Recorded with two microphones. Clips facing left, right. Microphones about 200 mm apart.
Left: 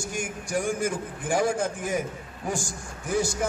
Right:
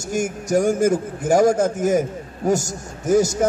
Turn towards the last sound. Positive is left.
turn(degrees=-40)  # may be behind; listen again after turning